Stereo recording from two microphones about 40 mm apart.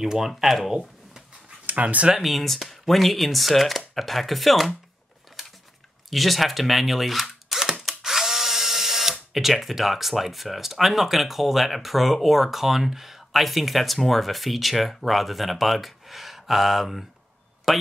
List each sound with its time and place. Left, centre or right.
0.0 s speech: centre
1.7 s speech: right
2.1 s speech: centre
6.0 s speech: centre
8.0 s drill: centre
9.3 s speech: centre